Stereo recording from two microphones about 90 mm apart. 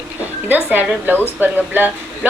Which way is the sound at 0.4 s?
20° right (ahead or behind).